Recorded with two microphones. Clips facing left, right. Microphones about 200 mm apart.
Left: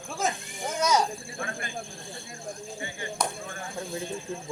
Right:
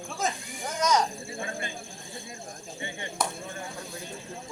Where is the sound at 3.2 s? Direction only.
5° right (ahead or behind).